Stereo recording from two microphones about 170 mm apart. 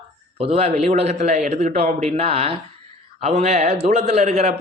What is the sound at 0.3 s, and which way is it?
A man's voice, 35° right (ahead or behind).